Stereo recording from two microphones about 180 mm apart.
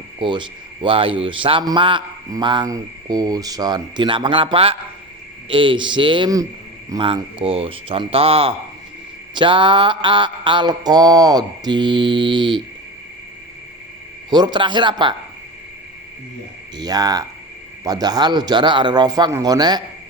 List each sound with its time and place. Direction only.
0.2 s a man's voice: 25° right (ahead or behind)
14.3 s a man's voice: 25° right (ahead or behind)
16.7 s a man's voice: 20° right (ahead or behind)